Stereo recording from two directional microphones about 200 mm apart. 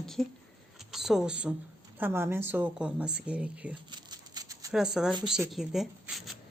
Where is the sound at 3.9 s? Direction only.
20° right (ahead or behind).